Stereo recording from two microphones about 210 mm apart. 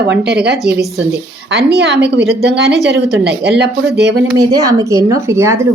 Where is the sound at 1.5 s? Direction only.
50° right (ahead or behind).